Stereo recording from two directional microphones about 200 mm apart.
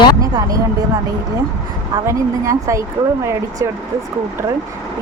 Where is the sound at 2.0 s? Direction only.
15° right (ahead or behind).